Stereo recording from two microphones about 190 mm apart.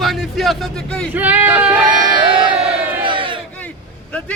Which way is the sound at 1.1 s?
10° right (ahead or behind).